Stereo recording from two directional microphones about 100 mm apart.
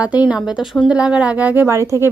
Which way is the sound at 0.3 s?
10° right (ahead or behind).